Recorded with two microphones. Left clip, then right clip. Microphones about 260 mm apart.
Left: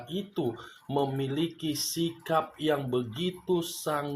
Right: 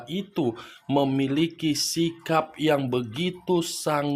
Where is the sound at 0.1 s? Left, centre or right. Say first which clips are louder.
Right 5 dB; right.